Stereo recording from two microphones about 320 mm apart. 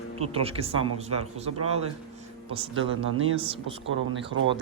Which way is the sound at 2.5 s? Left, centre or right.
Centre.